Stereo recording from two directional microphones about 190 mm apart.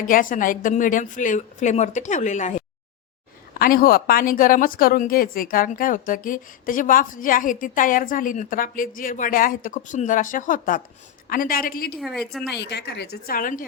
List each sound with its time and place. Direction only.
0.0 s a woman's voice: 45° left (ahead or behind)
3.6 s a woman's voice: 50° left (ahead or behind)
11.9 s a woman's voice: centre (ahead or behind)
12.5 s a woman's voice: 65° left (ahead or behind); by 13.7 s 45° left (ahead or behind)